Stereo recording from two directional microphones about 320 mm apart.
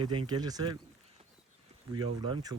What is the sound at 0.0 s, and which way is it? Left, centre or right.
Speech, centre.